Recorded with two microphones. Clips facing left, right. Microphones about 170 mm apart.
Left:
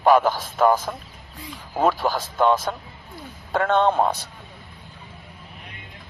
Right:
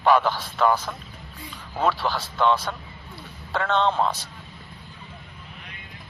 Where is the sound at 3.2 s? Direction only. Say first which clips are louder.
Left 4 dB; 50° left (ahead or behind).